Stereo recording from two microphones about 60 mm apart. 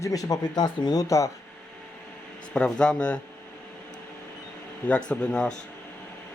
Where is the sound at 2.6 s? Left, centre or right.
Centre.